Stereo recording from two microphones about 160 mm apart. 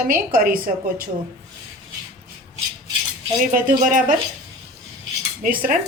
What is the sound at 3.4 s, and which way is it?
Speech, 60° right (ahead or behind).